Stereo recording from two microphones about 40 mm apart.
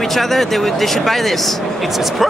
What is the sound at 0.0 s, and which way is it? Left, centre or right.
Speech, centre.